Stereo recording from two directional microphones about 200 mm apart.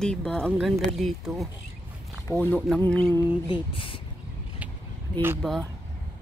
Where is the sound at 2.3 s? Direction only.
10° left (ahead or behind).